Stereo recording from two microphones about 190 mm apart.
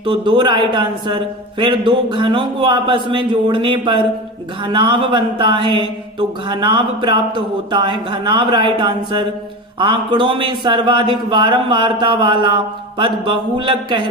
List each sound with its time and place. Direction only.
0.0 s speech: 25° right (ahead or behind)